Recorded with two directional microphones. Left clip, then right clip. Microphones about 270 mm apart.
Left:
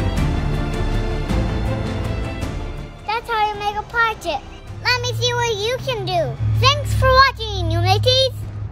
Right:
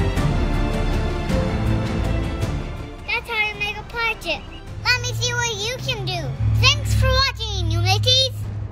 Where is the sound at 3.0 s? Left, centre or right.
Centre.